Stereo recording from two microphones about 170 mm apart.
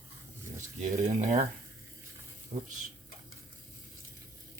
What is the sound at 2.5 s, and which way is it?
Speech, 35° right (ahead or behind).